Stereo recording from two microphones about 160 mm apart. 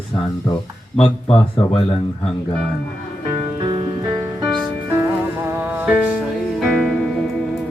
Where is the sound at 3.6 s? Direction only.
25° right (ahead or behind).